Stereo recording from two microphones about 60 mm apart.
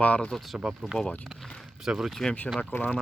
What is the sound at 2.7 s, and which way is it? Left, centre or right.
Speech, left.